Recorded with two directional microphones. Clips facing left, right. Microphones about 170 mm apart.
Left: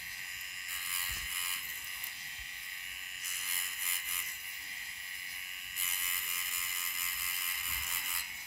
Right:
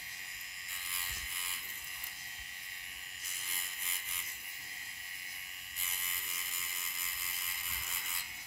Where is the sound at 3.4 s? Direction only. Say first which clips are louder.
Even; 25° right (ahead or behind).